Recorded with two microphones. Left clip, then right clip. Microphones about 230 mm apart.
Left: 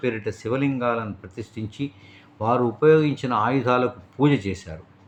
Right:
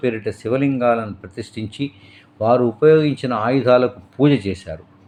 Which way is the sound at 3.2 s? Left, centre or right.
Centre.